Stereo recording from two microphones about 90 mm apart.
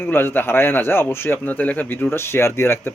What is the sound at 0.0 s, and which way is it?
Speech, 25° left (ahead or behind).